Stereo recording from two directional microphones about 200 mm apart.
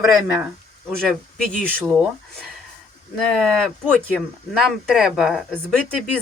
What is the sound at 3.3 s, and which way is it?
Speech, centre (ahead or behind).